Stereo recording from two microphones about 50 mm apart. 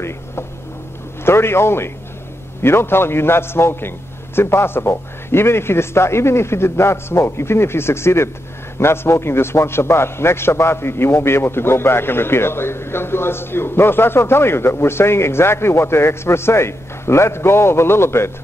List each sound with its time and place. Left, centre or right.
1.2 s a man's voice: left